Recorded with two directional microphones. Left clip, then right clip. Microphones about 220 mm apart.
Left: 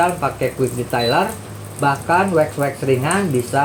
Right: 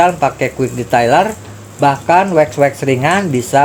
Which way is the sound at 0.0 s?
40° right (ahead or behind).